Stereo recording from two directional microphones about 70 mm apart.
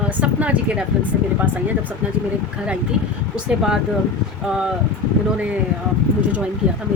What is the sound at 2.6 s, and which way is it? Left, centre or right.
Speech, centre.